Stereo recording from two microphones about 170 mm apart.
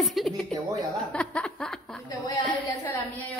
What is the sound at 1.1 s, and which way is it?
Chuckle, 5° left (ahead or behind).